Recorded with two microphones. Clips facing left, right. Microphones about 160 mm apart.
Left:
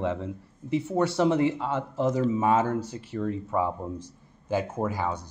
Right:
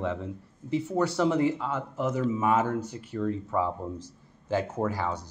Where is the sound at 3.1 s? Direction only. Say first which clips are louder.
Even; 20° left (ahead or behind).